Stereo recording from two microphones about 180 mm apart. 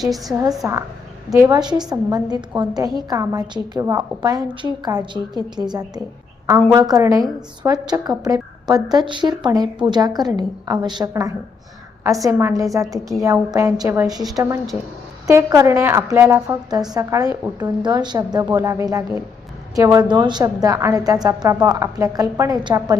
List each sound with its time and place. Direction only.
0.0 s a woman's voice: centre (ahead or behind)
0.6 s a woman's voice: 15° right (ahead or behind)
15.3 s a woman's voice: 20° right (ahead or behind)